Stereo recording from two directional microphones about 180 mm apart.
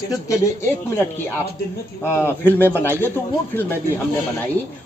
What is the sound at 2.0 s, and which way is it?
Speech, 15° left (ahead or behind).